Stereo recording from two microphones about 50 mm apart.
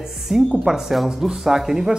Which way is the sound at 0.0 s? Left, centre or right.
Centre.